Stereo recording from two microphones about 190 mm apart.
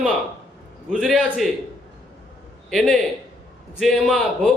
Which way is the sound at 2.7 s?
Centre (ahead or behind).